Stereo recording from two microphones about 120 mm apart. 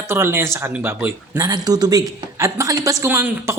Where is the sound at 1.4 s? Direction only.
35° right (ahead or behind).